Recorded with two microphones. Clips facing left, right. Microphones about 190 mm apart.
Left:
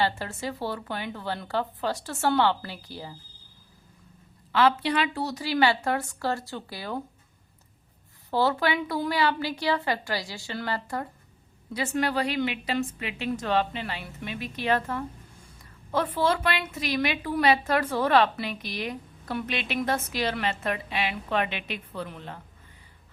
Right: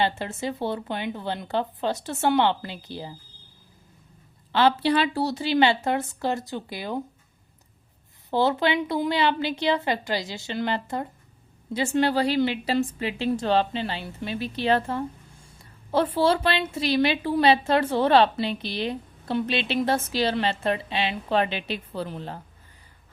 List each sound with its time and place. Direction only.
0.0 s a woman's voice: 20° right (ahead or behind)
4.5 s a woman's voice: 30° right (ahead or behind)
8.3 s a woman's voice: 20° right (ahead or behind)